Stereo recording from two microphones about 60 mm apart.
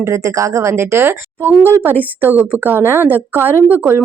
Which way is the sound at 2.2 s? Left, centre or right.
Right.